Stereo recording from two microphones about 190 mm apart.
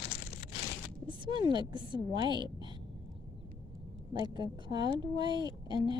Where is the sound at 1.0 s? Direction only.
25° right (ahead or behind).